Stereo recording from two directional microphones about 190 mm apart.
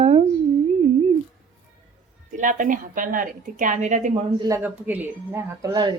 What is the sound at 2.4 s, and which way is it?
A woman's voice, 45° right (ahead or behind).